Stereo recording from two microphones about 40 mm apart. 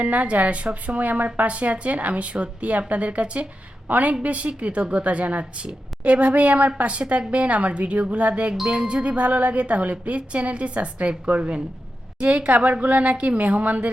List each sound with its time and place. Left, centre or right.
0.0 s a woman's voice: right
0.9 s a woman's voice: right